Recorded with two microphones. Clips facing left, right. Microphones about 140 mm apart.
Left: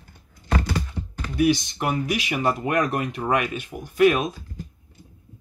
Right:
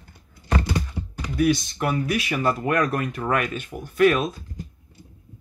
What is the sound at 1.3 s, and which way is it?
Speech, 15° left (ahead or behind).